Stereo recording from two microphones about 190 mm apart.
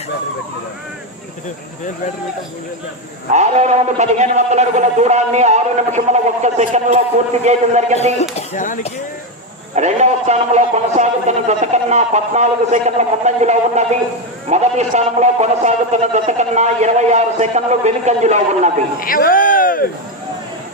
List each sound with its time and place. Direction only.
3.3 s a man's voice: 35° right (ahead or behind)
8.2 s speech: 40° left (ahead or behind)
9.7 s a man's voice: 35° right (ahead or behind)
18.9 s speech: 50° left (ahead or behind)